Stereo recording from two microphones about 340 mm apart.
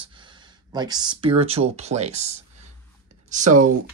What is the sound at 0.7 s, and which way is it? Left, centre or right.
Speech, centre.